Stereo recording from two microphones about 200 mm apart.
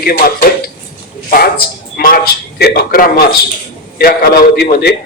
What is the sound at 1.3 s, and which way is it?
A man's voice, 45° left (ahead or behind).